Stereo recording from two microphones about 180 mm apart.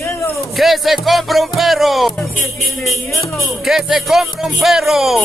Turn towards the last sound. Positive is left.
turn(degrees=0)  # may be behind; listen again after turning